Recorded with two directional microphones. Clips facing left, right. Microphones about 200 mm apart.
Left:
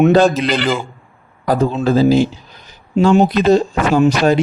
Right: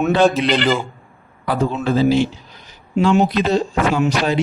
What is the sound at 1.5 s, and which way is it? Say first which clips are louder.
A man's voice: left 4 dB; 40° left (ahead or behind).